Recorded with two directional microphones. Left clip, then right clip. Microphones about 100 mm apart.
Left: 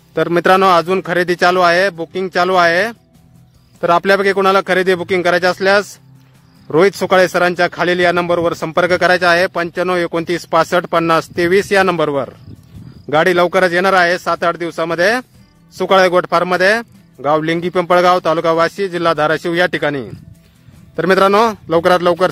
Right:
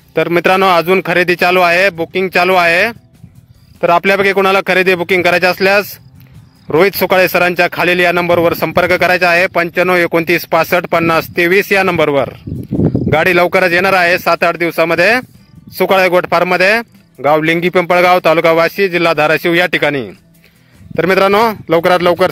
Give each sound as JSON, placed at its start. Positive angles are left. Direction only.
{"t": 0.1, "sound": "speech", "side_deg": -25}